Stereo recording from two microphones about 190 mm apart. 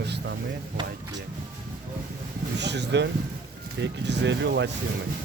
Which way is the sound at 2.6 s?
65° right (ahead or behind).